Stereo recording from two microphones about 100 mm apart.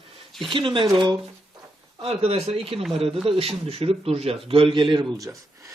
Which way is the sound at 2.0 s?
75° right (ahead or behind).